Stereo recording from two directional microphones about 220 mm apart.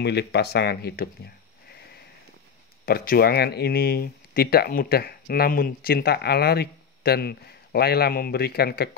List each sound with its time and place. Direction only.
0.0 s speech: 50° left (ahead or behind)
2.8 s speech: 45° left (ahead or behind)